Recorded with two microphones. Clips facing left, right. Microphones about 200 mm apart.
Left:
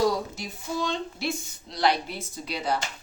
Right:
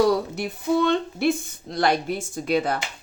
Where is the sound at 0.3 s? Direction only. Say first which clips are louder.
Right 9 dB; 60° right (ahead or behind).